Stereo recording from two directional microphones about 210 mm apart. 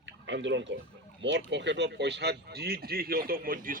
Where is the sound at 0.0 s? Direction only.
60° right (ahead or behind).